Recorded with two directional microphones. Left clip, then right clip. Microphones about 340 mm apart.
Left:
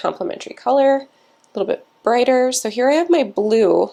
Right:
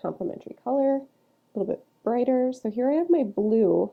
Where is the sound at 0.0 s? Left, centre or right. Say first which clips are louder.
Left 9 dB; centre.